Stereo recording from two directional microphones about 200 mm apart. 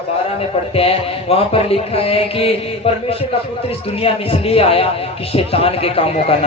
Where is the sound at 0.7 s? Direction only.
30° left (ahead or behind).